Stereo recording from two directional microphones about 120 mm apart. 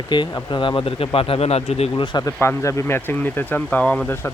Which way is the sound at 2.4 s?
25° left (ahead or behind).